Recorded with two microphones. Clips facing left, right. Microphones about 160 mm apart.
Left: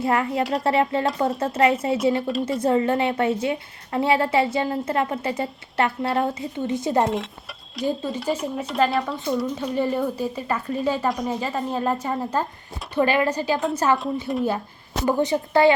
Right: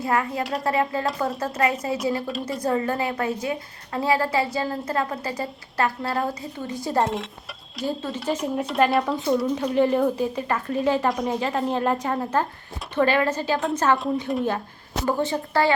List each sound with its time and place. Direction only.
0.0 s a woman's voice: 25° left (ahead or behind)
2.2 s speech: centre (ahead or behind)
2.6 s a woman's voice: 25° left (ahead or behind)
7.0 s a woman's voice: centre (ahead or behind)
13.6 s speech: centre (ahead or behind)
15.0 s a woman's voice: 15° left (ahead or behind)